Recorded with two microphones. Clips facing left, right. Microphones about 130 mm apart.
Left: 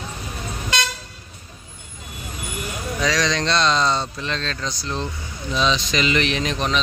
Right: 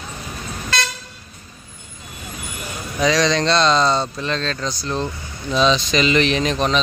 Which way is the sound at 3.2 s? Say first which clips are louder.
Right 4 dB; 35° right (ahead or behind).